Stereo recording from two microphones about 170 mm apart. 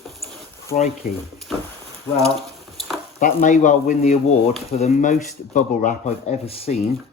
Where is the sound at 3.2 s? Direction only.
50° left (ahead or behind).